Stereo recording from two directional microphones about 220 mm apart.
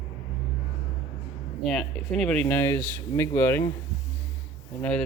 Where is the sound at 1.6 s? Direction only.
Centre (ahead or behind).